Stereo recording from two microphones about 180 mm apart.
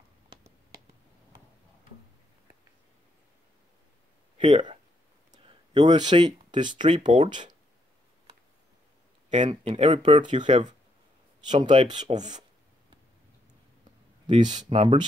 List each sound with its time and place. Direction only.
4.4 s speech: 30° right (ahead or behind)
9.4 s speech: 30° right (ahead or behind)
14.2 s speech: 25° right (ahead or behind)